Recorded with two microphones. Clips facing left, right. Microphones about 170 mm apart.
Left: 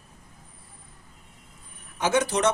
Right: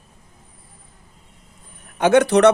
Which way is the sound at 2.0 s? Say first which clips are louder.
Right 10 dB; 60° right (ahead or behind).